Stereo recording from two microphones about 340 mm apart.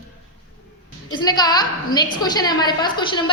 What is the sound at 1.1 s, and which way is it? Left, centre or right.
A woman's voice, centre.